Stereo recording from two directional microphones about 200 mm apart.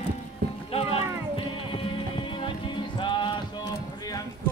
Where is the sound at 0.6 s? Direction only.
30° left (ahead or behind).